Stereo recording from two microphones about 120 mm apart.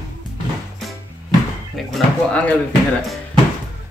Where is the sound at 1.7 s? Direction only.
5° left (ahead or behind).